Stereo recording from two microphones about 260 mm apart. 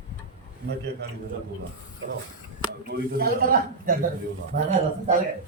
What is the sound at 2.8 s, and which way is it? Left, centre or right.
A man's voice, right.